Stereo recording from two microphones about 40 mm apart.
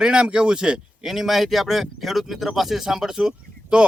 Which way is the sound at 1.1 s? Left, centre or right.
Centre.